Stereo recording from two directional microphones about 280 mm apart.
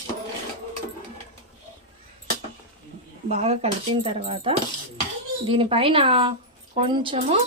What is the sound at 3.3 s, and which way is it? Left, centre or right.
A woman's voice, right.